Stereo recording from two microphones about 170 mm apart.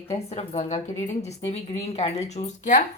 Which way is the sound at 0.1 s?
40° left (ahead or behind).